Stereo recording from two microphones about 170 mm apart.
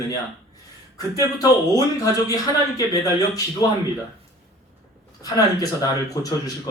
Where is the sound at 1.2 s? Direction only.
20° left (ahead or behind).